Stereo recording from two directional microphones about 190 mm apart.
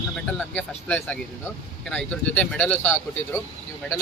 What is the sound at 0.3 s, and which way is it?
Speech, 5° left (ahead or behind).